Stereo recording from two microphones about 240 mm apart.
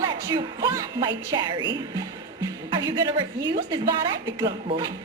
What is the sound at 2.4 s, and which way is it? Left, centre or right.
Music, centre.